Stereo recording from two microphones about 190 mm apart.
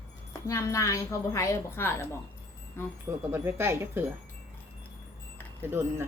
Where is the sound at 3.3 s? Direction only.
10° right (ahead or behind).